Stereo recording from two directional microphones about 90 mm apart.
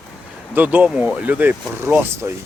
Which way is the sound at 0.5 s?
20° right (ahead or behind).